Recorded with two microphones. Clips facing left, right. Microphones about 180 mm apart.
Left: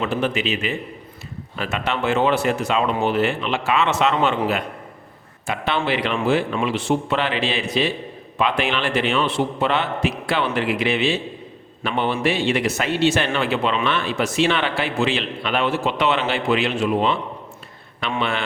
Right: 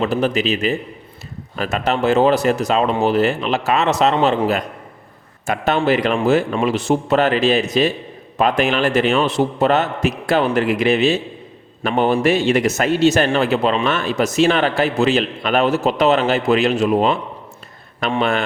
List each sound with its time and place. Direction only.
0.0 s a man's voice: 40° right (ahead or behind)